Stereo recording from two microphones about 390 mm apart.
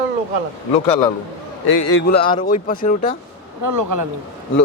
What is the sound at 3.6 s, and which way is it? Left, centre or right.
Speech, right.